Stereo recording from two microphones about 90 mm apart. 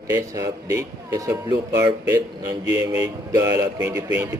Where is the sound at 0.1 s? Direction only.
40° right (ahead or behind).